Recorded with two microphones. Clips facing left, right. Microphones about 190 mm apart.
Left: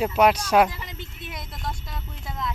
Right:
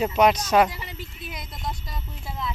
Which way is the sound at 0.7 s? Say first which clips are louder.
Right 1 dB; 10° right (ahead or behind).